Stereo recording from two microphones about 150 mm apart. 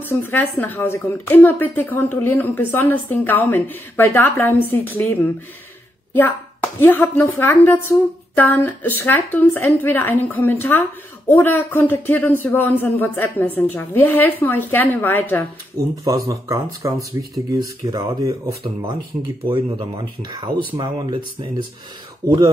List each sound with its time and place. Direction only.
0.0 s speech: 15° left (ahead or behind)
16.1 s speech: 20° right (ahead or behind)
18.6 s speech: 35° right (ahead or behind)